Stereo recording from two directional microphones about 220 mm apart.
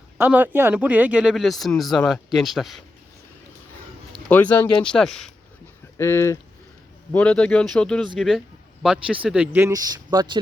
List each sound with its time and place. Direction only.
0.2 s speech: 10° right (ahead or behind)
4.1 s speech: 5° left (ahead or behind)
6.0 s a man's voice: 10° left (ahead or behind); by 10.4 s 20° right (ahead or behind)